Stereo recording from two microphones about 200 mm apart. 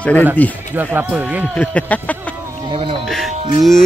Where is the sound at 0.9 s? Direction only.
5° right (ahead or behind).